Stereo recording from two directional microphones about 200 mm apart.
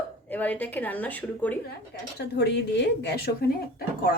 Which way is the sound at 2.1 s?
55° left (ahead or behind).